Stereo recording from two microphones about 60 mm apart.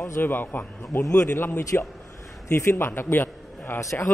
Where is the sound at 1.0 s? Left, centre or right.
Left.